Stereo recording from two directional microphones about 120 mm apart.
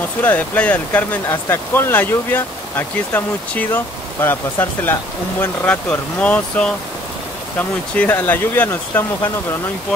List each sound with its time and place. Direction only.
0.2 s speech: 15° left (ahead or behind)